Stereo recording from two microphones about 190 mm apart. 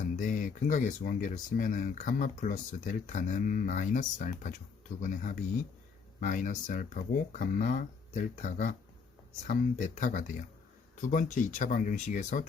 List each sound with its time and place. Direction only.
0.2 s speech: 45° left (ahead or behind)